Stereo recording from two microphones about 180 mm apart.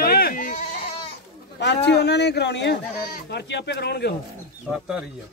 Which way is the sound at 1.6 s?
70° left (ahead or behind).